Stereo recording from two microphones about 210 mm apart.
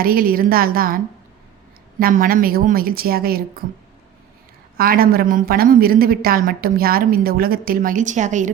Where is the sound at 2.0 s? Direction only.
40° right (ahead or behind).